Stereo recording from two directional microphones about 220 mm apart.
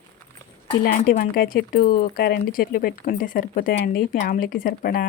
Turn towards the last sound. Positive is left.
turn(degrees=40)  # may be behind; listen again after turning